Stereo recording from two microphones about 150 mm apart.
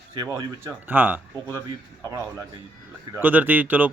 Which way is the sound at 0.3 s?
15° right (ahead or behind).